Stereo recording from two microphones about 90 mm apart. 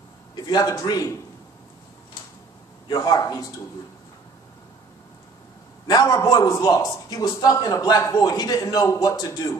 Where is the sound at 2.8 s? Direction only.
50° left (ahead or behind).